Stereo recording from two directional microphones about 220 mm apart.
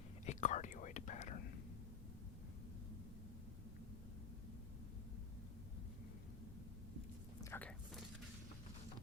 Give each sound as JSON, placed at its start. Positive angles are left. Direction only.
{"t": 0.3, "sound": "whispering", "side_deg": 35}
{"t": 7.5, "sound": "biting", "side_deg": 5}